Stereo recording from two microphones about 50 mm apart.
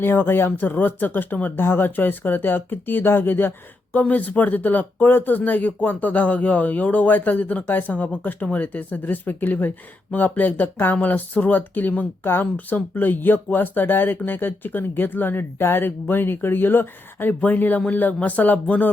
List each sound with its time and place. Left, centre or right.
0.0 s speech: left
3.9 s speech: left